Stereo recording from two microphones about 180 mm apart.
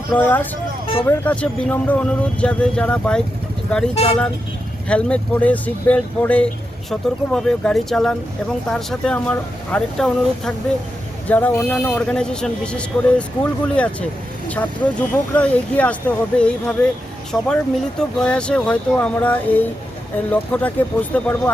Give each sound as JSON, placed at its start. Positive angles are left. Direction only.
{"t": 0.1, "sound": "speech", "side_deg": 10}
{"t": 3.9, "sound": "speech", "side_deg": 35}
{"t": 4.9, "sound": "speech", "side_deg": 5}